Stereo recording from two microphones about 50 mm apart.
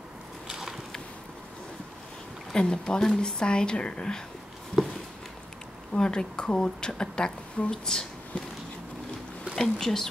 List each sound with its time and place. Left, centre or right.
0.5 s a sound: centre
2.5 s a woman's voice: centre
5.9 s a woman's voice: centre
9.6 s a woman's voice: centre